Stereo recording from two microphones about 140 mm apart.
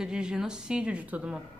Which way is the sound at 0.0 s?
5° right (ahead or behind).